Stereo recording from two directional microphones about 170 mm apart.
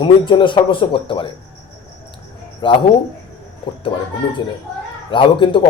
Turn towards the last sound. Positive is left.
turn(degrees=30)  # may be behind; listen again after turning